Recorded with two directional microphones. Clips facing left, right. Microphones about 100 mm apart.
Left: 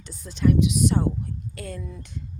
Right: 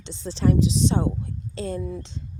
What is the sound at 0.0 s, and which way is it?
A woman's voice, 25° right (ahead or behind).